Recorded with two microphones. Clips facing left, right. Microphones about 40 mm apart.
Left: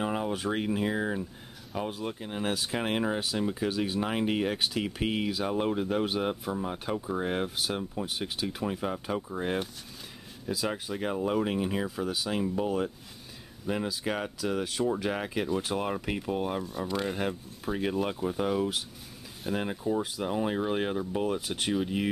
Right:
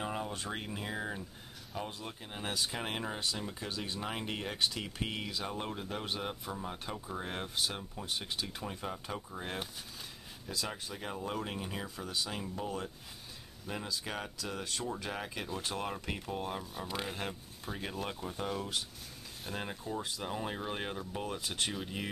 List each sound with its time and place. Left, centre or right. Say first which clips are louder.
0.0 s a sound: left 7 dB; centre
0.5 s speech: left 10 dB; centre
7.5 s speech: left 5 dB; centre
10.7 s speech: left 9 dB; left
14.9 s speech: left 9 dB; centre
16.6 s speech: left 8 dB; centre
17.1 s speech: left 8 dB; centre